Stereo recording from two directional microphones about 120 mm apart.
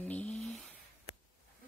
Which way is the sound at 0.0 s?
10° left (ahead or behind).